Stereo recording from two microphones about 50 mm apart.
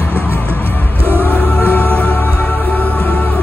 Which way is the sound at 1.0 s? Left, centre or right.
Right.